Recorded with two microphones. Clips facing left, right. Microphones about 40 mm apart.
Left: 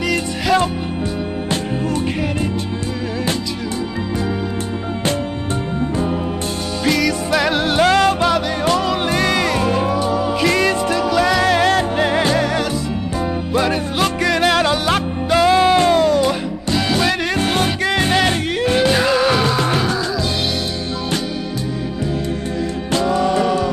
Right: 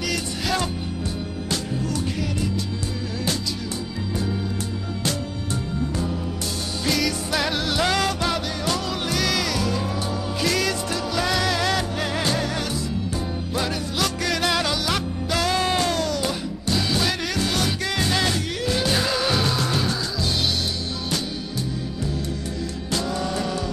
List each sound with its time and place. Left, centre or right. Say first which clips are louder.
5.8 s music: left 7 dB; left
6.8 s music: left 7 dB; centre
7.5 s music: left 10 dB; left
9.9 s music: left 9 dB; centre
10.4 s music: left 6 dB; left
11.0 s music: left 8 dB; centre
11.4 s music: left 8 dB; left
12.3 s music: left 7 dB; centre
13.7 s music: left 7 dB; left
15.9 s music: left 10 dB; left
16.3 s music: left 6 dB; centre
17.4 s music: left 6 dB; left
18.9 s music: left 6 dB; centre
22.9 s music: left 10 dB; left